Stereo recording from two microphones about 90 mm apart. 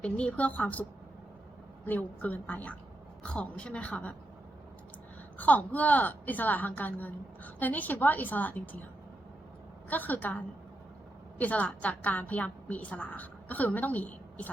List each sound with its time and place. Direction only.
0.0 s a woman's voice: 15° left (ahead or behind)
5.4 s a woman's voice: 15° left (ahead or behind)
9.9 s a woman's voice: 20° left (ahead or behind)
11.3 s a woman's voice: 15° left (ahead or behind)